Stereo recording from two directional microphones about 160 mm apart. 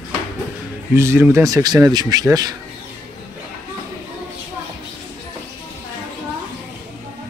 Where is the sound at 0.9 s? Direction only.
15° right (ahead or behind).